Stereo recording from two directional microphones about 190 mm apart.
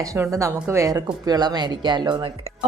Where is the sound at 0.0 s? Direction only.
15° right (ahead or behind).